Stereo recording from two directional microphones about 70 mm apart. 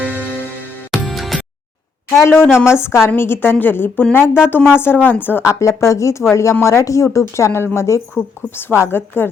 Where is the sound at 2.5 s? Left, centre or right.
Centre.